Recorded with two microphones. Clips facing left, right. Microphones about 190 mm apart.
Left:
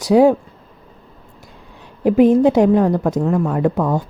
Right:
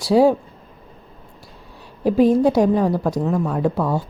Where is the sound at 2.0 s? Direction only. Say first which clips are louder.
Left 3 dB; 15° left (ahead or behind).